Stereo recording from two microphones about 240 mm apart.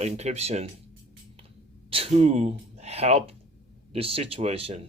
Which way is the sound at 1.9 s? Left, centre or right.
Right.